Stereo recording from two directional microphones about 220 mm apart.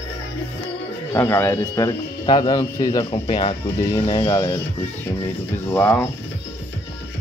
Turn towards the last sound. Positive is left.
turn(degrees=10)  # may be behind; listen again after turning